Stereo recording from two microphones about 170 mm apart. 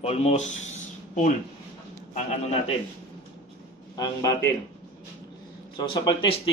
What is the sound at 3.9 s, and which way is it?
Speech, 20° left (ahead or behind).